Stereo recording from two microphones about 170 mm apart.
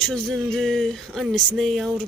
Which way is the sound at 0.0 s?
5° left (ahead or behind).